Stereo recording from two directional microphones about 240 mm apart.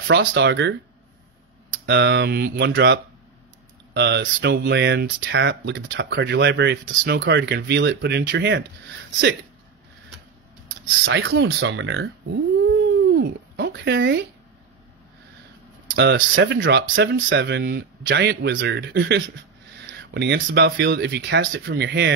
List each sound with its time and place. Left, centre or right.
0.1 s speech: right
1.9 s speech: right
11.1 s speech: right
12.6 s a sound: right
15.9 s speech: right